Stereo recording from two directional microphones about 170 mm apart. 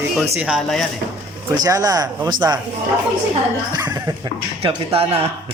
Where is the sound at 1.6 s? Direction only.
20° right (ahead or behind).